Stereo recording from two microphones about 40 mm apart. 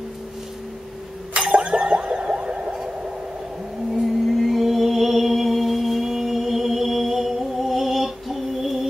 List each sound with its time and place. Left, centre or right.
1.6 s boing: right
3.9 s music: centre